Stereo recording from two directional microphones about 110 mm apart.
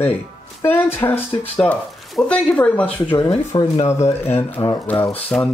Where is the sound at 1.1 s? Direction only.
65° left (ahead or behind).